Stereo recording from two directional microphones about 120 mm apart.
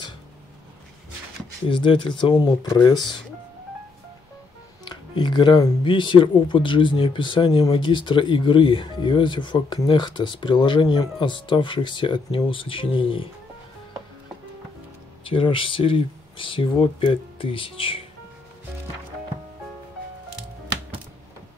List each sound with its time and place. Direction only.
1.7 s speech: 40° left (ahead or behind)
4.8 s speech: 40° left (ahead or behind)
15.2 s speech: 45° left (ahead or behind)